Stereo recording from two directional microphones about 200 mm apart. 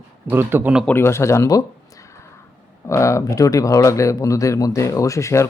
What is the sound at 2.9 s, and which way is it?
Speech, 15° left (ahead or behind).